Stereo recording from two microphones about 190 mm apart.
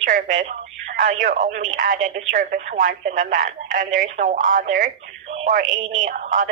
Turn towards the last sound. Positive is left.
turn(degrees=-45)  # may be behind; listen again after turning